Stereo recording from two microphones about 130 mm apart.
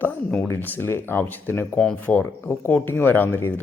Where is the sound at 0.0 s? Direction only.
15° left (ahead or behind).